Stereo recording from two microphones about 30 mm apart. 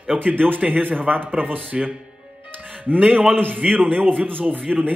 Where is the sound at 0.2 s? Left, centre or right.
Right.